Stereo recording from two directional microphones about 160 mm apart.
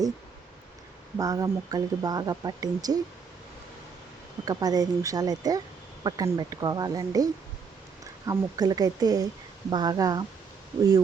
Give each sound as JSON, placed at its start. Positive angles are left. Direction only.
{"t": 1.2, "sound": "speech", "side_deg": -25}
{"t": 4.4, "sound": "speech", "side_deg": -25}
{"t": 8.3, "sound": "speech", "side_deg": -25}